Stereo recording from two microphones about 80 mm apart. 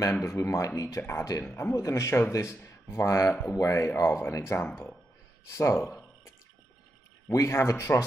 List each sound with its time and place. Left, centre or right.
0.2 s speech: left
1.4 s a man's voice: left
1.7 s speech: left
7.2 s speech: left